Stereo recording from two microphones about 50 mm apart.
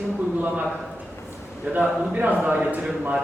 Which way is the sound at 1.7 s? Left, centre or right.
Right.